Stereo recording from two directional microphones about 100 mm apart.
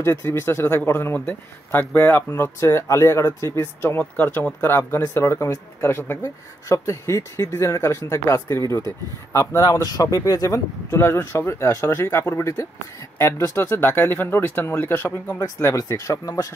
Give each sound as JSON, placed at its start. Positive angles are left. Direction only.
{"t": 0.0, "sound": "speech", "side_deg": 25}